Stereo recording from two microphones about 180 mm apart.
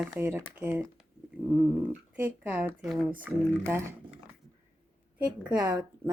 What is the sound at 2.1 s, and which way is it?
Speech, 10° right (ahead or behind).